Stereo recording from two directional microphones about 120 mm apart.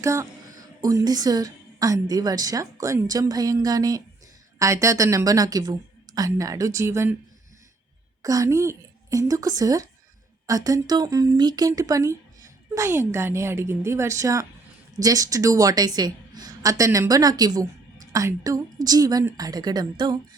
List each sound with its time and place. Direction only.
0.0 s a woman's voice: 25° right (ahead or behind)
8.2 s a woman's voice: 30° right (ahead or behind)